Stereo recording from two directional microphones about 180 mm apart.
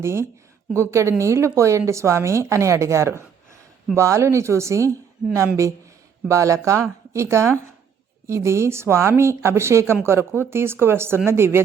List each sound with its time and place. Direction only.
0.0 s speech: 15° right (ahead or behind)
6.2 s speech: 15° right (ahead or behind)